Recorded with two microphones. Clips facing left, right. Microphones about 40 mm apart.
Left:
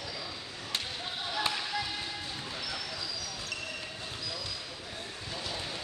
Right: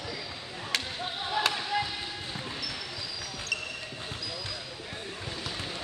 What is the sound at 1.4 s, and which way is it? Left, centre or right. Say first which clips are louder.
Chop: right 4 dB; right.